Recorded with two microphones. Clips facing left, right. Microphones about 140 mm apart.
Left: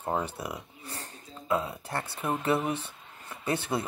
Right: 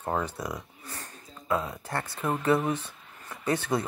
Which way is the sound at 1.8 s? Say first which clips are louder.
Right 1 dB; 25° left (ahead or behind).